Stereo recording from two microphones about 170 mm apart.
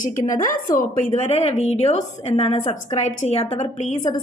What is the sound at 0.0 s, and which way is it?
A woman's voice, 50° left (ahead or behind).